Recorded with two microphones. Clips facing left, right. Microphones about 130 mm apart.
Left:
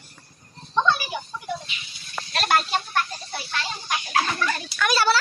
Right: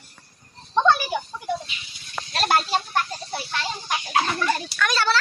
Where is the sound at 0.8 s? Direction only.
50° right (ahead or behind).